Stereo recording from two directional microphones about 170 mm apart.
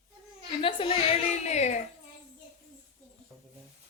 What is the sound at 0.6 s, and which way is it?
A woman's voice, 30° left (ahead or behind).